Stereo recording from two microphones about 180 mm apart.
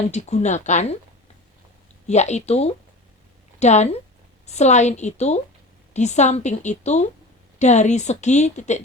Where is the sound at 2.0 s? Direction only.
40° left (ahead or behind).